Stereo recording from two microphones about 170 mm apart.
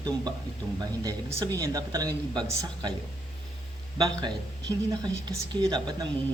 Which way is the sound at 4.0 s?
25° right (ahead or behind).